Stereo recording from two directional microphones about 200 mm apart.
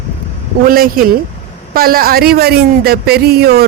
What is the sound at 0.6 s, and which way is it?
Speech, 45° right (ahead or behind).